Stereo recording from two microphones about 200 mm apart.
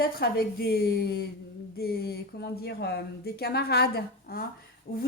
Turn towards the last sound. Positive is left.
turn(degrees=50)  # may be behind; listen again after turning